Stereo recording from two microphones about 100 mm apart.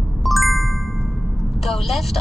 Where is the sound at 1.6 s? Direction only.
Centre (ahead or behind).